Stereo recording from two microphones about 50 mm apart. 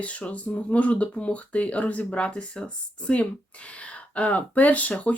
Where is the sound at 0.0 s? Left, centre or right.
Left.